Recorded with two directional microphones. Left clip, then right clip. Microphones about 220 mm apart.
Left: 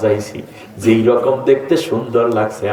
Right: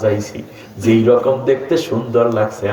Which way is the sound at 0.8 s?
55° left (ahead or behind).